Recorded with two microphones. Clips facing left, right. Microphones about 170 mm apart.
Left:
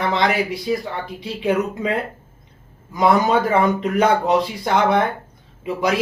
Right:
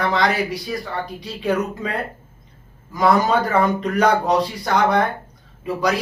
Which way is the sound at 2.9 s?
20° left (ahead or behind).